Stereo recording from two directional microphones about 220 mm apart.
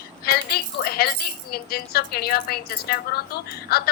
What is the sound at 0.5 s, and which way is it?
A woman's voice, 45° left (ahead or behind).